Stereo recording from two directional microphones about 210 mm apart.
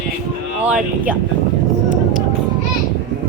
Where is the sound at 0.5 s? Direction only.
5° right (ahead or behind).